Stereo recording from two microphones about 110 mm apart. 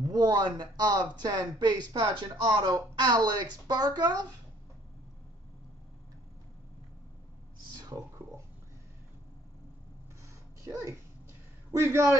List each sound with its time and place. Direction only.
0.0 s speech: 35° right (ahead or behind)
7.9 s speech: 30° right (ahead or behind)
10.6 s a man's voice: 30° right (ahead or behind)